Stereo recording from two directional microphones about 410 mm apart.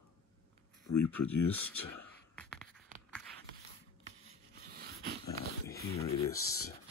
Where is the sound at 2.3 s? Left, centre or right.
Centre.